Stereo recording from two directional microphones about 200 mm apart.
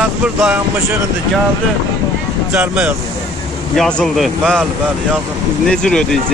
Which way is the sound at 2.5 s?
5° right (ahead or behind).